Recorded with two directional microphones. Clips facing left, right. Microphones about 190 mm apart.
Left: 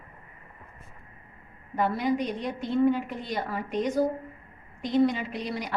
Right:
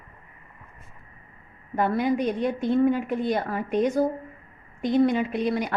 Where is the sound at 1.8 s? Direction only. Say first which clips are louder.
Right 3 dB; 55° right (ahead or behind).